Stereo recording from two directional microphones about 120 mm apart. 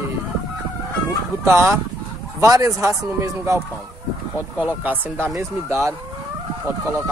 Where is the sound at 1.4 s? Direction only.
20° right (ahead or behind).